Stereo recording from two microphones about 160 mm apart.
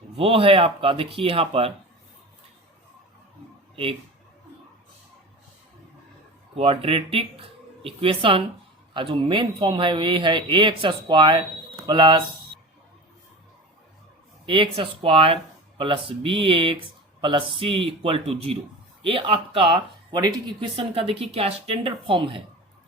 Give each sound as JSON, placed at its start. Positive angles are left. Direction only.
{"t": 0.2, "sound": "speech", "side_deg": -35}
{"t": 6.5, "sound": "speech", "side_deg": -35}
{"t": 14.4, "sound": "speech", "side_deg": -30}